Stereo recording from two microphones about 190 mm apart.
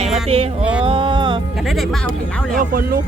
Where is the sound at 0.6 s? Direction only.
5° right (ahead or behind).